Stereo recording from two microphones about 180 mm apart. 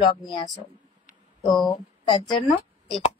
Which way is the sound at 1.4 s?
25° left (ahead or behind).